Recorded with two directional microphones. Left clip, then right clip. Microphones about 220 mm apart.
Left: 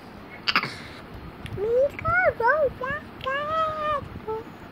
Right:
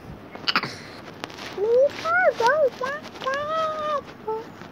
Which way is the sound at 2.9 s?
5° right (ahead or behind).